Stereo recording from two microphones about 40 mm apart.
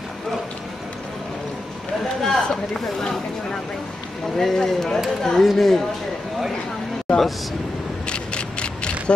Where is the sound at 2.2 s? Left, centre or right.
Centre.